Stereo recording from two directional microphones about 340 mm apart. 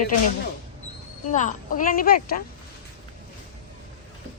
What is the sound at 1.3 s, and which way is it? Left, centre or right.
Speech, left.